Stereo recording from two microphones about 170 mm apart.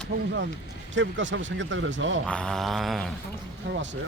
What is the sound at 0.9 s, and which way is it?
Speech, 90° right.